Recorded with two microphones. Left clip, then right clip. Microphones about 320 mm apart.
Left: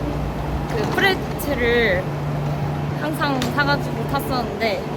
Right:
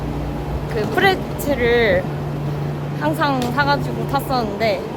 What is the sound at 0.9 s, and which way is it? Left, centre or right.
Speech, centre.